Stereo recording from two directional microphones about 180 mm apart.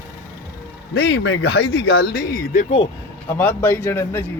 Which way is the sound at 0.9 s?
75° left (ahead or behind).